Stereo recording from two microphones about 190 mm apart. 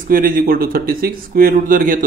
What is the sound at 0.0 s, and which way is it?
Speech, 50° right (ahead or behind).